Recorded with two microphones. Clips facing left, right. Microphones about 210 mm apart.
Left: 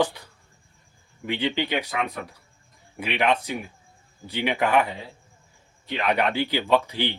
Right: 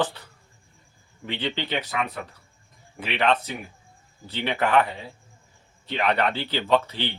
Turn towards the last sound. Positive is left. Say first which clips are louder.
# left 1 dB
turn(degrees=15)  # may be behind; listen again after turning